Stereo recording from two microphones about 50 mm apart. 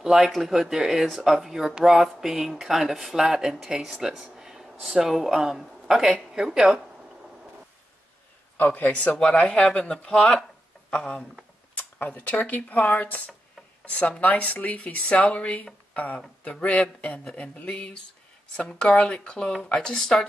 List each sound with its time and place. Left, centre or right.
0.0 s speech: centre
8.5 s a man's voice: left
9.1 s speech: left